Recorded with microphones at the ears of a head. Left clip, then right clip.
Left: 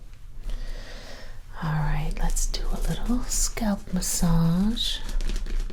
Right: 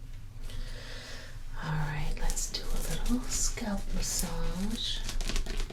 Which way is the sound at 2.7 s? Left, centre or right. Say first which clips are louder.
Left 5 dB; left.